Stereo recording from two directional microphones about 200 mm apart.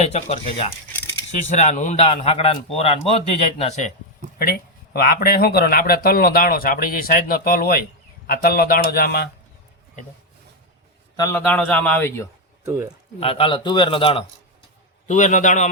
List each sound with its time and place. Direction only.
0.0 s a man's voice: 30° left (ahead or behind)
4.9 s speech: 50° left (ahead or behind)
11.2 s a man's voice: 10° left (ahead or behind)
12.6 s speech: 15° right (ahead or behind)
13.1 s a man's voice: 25° left (ahead or behind)
15.0 s a man's voice: 40° left (ahead or behind)